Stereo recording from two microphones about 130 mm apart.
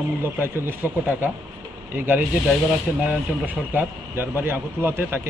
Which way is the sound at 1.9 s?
15° right (ahead or behind).